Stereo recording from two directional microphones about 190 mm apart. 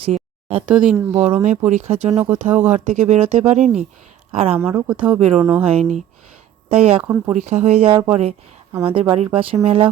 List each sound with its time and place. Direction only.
0.0 s a sound: 30° right (ahead or behind)
0.7 s speech: 5° right (ahead or behind)
1.4 s speech: 35° right (ahead or behind)
2.2 s speech: 10° right (ahead or behind)
2.7 s speech: 35° right (ahead or behind)
4.5 s speech: 15° right (ahead or behind)
5.7 s speech: 35° right (ahead or behind)
7.0 s speech: 5° right (ahead or behind)
7.3 s speech: 35° right (ahead or behind)